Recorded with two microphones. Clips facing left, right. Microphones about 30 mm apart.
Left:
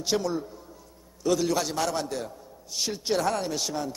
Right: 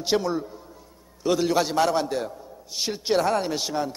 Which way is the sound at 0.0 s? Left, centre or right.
Right.